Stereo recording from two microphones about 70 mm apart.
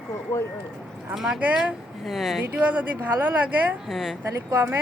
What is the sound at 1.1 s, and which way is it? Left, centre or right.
Speech, centre.